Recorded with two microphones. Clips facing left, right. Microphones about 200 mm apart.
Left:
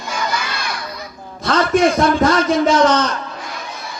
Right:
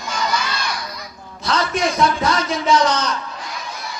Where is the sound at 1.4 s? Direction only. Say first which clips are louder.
Left 6 dB; 50° left (ahead or behind).